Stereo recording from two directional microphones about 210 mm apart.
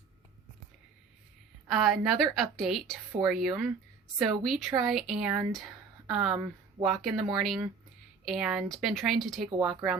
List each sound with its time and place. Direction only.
1.6 s a woman's voice: centre (ahead or behind)